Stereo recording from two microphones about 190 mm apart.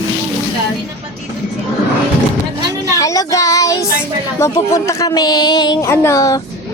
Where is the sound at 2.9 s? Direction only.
15° left (ahead or behind).